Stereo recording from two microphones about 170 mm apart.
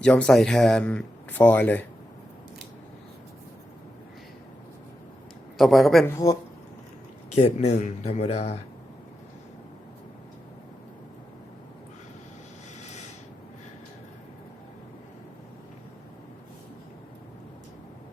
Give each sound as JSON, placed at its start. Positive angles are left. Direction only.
{"t": 0.0, "sound": "speech", "side_deg": 5}
{"t": 5.5, "sound": "a man's voice", "side_deg": 0}
{"t": 6.1, "sound": "speech", "side_deg": 15}
{"t": 7.3, "sound": "speech", "side_deg": 40}